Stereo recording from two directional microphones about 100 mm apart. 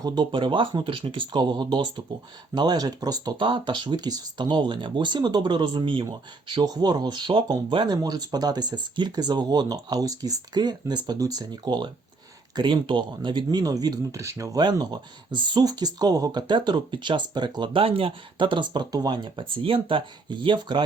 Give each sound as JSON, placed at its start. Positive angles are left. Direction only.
{"t": 0.0, "sound": "speech", "side_deg": -45}
{"t": 14.6, "sound": "speech", "side_deg": -45}